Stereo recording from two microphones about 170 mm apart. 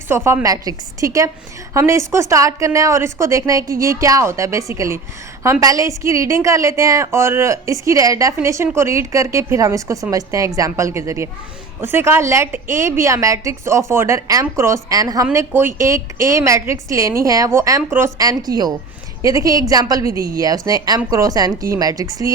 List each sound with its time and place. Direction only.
0.3 s a woman's voice: 20° right (ahead or behind)